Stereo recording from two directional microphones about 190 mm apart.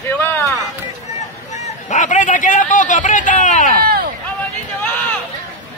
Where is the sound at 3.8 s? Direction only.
55° right (ahead or behind).